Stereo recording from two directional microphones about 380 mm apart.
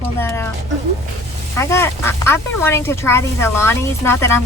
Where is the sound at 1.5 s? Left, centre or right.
Centre.